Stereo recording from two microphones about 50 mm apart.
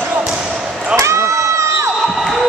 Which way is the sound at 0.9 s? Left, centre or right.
Right.